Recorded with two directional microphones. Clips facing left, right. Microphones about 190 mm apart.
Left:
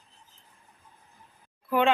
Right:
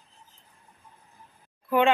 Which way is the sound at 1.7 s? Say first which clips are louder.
Right 2 dB; centre (ahead or behind).